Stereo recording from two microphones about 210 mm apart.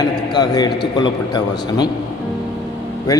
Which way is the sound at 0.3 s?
20° left (ahead or behind).